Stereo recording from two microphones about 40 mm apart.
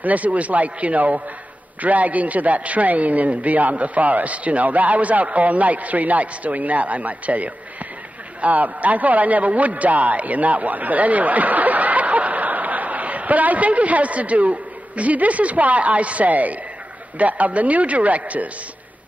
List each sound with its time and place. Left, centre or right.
0.0 s a man's voice: right